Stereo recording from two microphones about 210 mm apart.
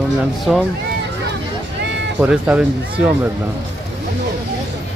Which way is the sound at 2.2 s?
5° right (ahead or behind).